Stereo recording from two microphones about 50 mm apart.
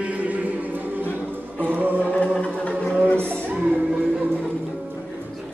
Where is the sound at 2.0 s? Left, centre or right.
Left.